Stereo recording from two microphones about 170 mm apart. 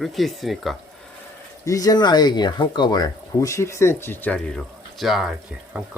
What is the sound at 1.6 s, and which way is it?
Speech, 20° left (ahead or behind).